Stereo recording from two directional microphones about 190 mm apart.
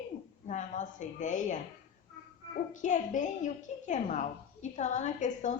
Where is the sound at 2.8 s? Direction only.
40° left (ahead or behind).